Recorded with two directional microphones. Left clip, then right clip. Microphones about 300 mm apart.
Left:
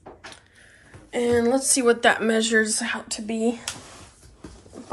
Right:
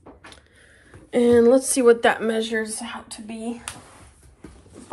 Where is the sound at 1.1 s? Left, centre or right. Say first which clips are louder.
Right 6 dB; centre.